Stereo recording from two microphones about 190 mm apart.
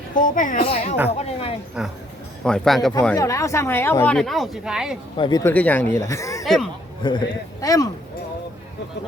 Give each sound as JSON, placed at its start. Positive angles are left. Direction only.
{"t": 0.1, "sound": "a woman's voice", "side_deg": 45}
{"t": 0.6, "sound": "speech", "side_deg": 30}
{"t": 1.8, "sound": "speech", "side_deg": -5}
{"t": 3.2, "sound": "speech", "side_deg": 15}
{"t": 5.1, "sound": "speech", "side_deg": 25}
{"t": 6.4, "sound": "speech", "side_deg": 0}
{"t": 7.0, "sound": "a man's voice", "side_deg": 25}